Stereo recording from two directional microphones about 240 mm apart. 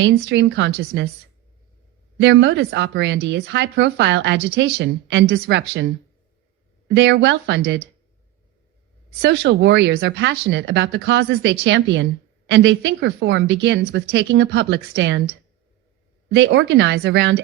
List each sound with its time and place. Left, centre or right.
0.0 s speech: right
2.1 s speech: right
9.2 s speech: right
16.3 s speech: right